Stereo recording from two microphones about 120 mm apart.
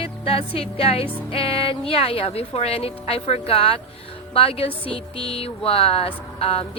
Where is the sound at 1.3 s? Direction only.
50° left (ahead or behind).